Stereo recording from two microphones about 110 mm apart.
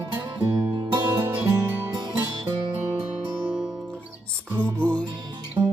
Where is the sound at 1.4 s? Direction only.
30° right (ahead or behind).